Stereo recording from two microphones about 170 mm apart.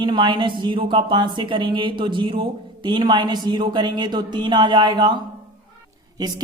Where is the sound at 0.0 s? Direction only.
30° right (ahead or behind).